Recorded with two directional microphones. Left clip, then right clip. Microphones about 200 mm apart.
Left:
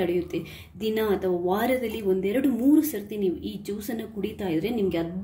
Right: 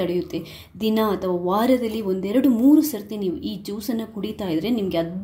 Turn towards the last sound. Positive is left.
turn(degrees=-40)  # may be behind; listen again after turning